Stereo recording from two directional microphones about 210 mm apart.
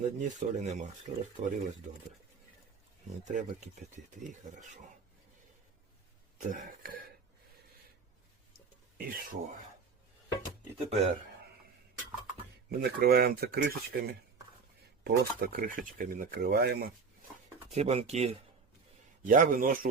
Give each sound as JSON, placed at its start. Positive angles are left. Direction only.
{"t": 0.0, "sound": "speech", "side_deg": -35}
{"t": 3.2, "sound": "speech", "side_deg": -35}
{"t": 6.5, "sound": "speech", "side_deg": -40}
{"t": 9.0, "sound": "speech", "side_deg": -40}
{"t": 10.8, "sound": "speech", "side_deg": -30}
{"t": 12.7, "sound": "speech", "side_deg": -45}
{"t": 17.7, "sound": "speech", "side_deg": -30}